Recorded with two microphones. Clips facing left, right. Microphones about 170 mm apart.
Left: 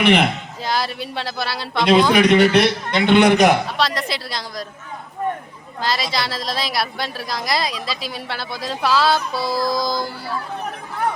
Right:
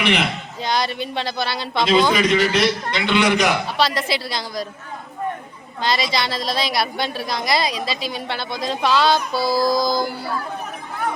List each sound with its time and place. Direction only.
0.0 s a man's voice: 50° left (ahead or behind)
0.6 s a woman's voice: 5° left (ahead or behind)
2.1 s a man's voice: 65° left (ahead or behind)
3.8 s a woman's voice: centre (ahead or behind)
5.8 s a woman's voice: centre (ahead or behind)